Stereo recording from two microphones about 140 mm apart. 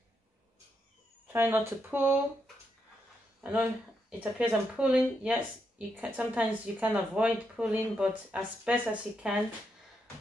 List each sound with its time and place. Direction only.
1.2 s speech: 15° right (ahead or behind)
3.3 s speech: 10° right (ahead or behind)